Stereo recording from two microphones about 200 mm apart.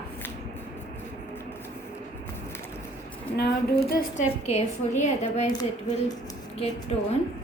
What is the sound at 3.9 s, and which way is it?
Speech, 45° left (ahead or behind).